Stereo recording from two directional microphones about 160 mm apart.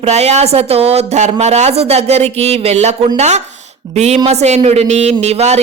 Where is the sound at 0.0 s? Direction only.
45° right (ahead or behind).